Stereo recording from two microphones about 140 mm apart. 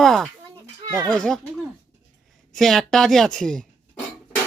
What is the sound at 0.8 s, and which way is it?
Speech, 25° right (ahead or behind).